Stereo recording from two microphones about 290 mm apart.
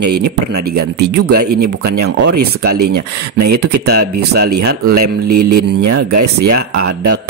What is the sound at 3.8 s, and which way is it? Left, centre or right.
Speech, right.